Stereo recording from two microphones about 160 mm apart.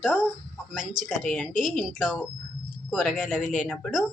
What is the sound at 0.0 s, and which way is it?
A woman's voice, 5° right (ahead or behind).